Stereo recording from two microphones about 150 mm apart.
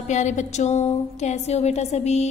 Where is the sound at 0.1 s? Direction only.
50° left (ahead or behind).